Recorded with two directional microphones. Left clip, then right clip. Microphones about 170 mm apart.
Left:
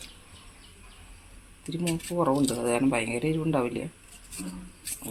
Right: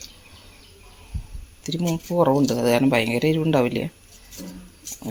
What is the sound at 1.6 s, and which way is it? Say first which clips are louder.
Speech: right 5 dB; 50° right (ahead or behind).